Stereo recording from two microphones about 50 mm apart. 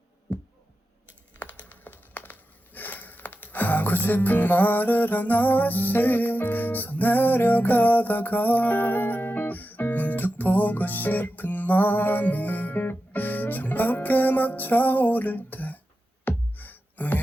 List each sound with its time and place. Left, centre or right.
1.4 s a sound: left
2.7 s speech: left
16.2 s music: left